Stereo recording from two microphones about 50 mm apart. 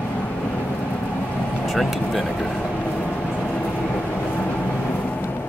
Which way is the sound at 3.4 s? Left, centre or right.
Left.